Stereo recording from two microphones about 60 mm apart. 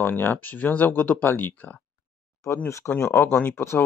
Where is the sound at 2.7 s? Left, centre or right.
Left.